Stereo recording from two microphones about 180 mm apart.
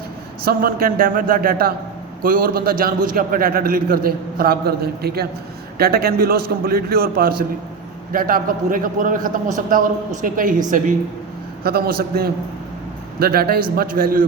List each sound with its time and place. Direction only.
0.4 s a man's voice: 55° right (ahead or behind)